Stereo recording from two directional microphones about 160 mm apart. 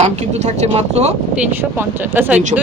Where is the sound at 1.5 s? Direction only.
15° right (ahead or behind).